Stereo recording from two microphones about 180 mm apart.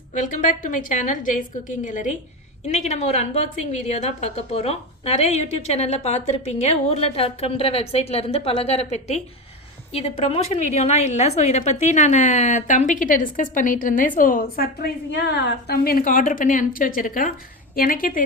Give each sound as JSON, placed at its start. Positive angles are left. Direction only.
{"t": 0.1, "sound": "a woman's voice", "side_deg": 45}